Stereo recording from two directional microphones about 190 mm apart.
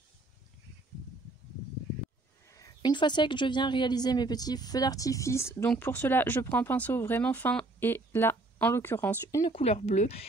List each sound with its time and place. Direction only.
2.5 s speech: 20° left (ahead or behind)
9.4 s speech: 30° left (ahead or behind)